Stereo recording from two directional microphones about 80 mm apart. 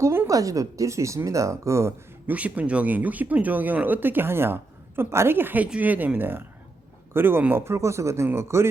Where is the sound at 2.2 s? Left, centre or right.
Centre; by 8.6 s right.